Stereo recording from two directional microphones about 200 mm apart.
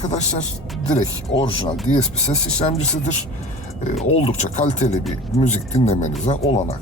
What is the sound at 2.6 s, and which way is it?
Speech, 35° left (ahead or behind).